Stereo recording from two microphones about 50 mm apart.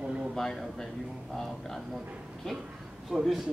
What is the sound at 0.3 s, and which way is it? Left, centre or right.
A man's voice, centre.